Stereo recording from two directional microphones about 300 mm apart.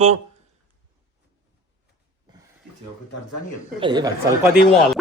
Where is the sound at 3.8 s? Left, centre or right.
Centre.